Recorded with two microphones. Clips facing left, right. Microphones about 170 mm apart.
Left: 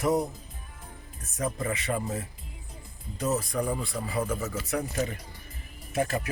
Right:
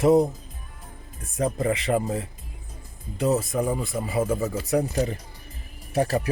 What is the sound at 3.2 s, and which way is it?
Speech, 30° right (ahead or behind).